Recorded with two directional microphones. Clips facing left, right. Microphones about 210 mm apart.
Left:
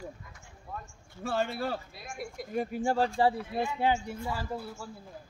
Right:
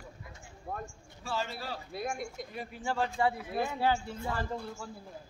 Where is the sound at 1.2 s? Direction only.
55° left (ahead or behind).